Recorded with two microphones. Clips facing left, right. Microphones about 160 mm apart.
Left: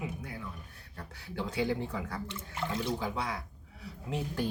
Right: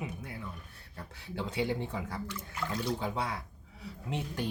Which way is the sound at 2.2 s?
25° left (ahead or behind).